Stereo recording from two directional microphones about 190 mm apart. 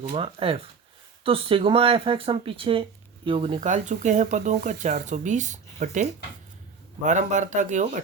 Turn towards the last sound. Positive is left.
turn(degrees=-40)  # may be behind; listen again after turning